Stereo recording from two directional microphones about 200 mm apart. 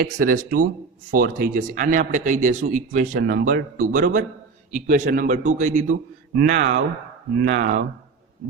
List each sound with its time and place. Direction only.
0.0 s speech: 45° right (ahead or behind)